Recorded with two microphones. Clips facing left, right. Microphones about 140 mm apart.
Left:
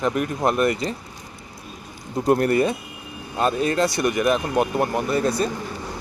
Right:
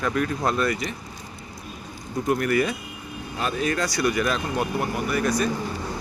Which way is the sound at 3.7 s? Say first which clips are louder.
Left 3 dB; 25° left (ahead or behind).